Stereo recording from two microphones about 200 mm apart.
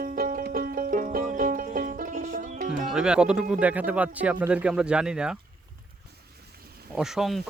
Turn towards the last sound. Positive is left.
turn(degrees=0)  # may be behind; listen again after turning